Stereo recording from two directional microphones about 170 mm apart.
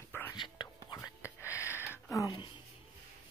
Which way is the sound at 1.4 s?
15° left (ahead or behind).